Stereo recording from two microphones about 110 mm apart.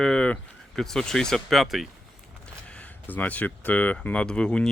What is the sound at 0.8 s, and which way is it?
Speech, 5° left (ahead or behind).